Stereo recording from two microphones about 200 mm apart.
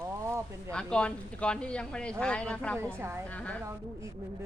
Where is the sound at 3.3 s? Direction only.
5° left (ahead or behind).